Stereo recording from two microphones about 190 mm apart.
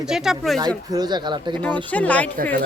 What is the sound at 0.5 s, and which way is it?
Speech, 20° right (ahead or behind).